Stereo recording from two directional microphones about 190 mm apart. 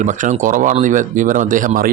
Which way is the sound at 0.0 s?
40° right (ahead or behind).